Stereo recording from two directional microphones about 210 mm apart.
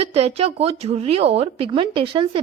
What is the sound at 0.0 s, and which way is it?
A woman's voice, 30° right (ahead or behind).